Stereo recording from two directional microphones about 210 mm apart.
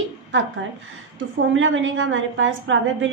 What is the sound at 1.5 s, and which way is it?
A woman's voice, 65° right (ahead or behind).